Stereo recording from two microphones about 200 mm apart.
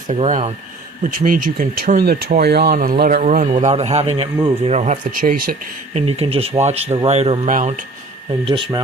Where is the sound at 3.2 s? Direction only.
35° right (ahead or behind).